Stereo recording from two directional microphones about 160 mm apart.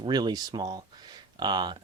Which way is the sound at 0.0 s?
25° right (ahead or behind).